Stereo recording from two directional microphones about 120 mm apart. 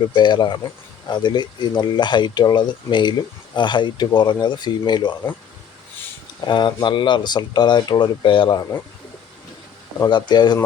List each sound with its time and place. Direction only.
0.1 s speech: 40° left (ahead or behind)
6.4 s speech: 40° left (ahead or behind)
10.1 s speech: 40° left (ahead or behind)